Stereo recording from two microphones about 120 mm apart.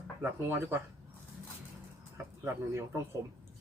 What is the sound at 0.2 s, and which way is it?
Speech, 20° right (ahead or behind).